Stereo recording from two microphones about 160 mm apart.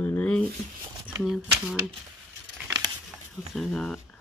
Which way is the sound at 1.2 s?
Centre (ahead or behind).